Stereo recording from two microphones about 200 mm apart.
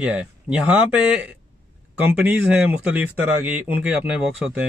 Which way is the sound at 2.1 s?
10° right (ahead or behind).